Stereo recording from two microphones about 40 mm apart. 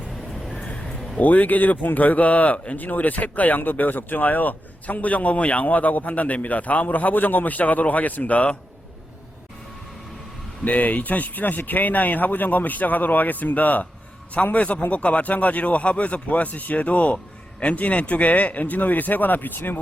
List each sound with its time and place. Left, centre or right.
0.1 s vehicle: centre
0.5 s a sound: left
1.2 s speech: left
10.6 s a man's voice: left